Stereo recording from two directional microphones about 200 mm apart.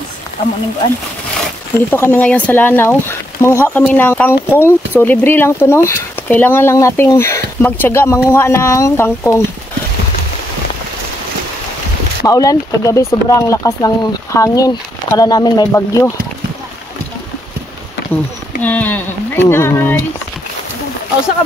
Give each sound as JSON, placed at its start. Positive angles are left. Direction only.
{"t": 1.9, "sound": "speech", "side_deg": 10}
{"t": 12.3, "sound": "speech", "side_deg": 15}
{"t": 18.6, "sound": "speech", "side_deg": 10}